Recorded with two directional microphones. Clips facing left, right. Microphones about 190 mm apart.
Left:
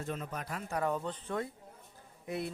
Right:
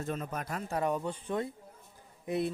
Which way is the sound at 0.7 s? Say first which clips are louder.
Right 2 dB; 20° right (ahead or behind).